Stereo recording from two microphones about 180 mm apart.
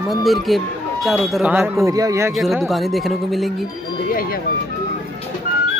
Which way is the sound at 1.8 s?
20° right (ahead or behind).